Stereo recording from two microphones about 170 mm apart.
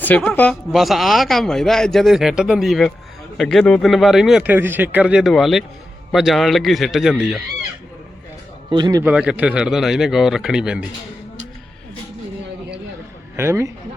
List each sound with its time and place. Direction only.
0.2 s a man's voice: 10° left (ahead or behind)
8.7 s a man's voice: 25° right (ahead or behind)
9.0 s a man's voice: 10° right (ahead or behind)
13.3 s a man's voice: 15° right (ahead or behind)